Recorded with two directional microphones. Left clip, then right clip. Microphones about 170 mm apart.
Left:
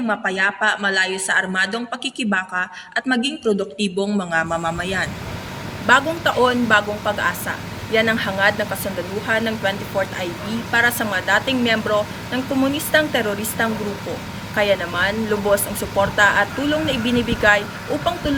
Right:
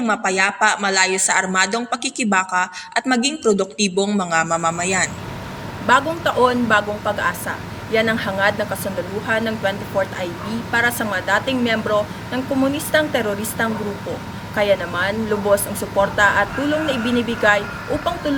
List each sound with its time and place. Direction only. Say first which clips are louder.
0.1 s speech: right 1 dB; 20° right (ahead or behind)
5.8 s speech: even; 5° right (ahead or behind)